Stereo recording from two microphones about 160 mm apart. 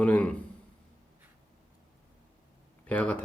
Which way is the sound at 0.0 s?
10° left (ahead or behind).